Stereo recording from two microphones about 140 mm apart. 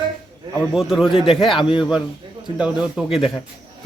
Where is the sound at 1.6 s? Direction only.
35° left (ahead or behind).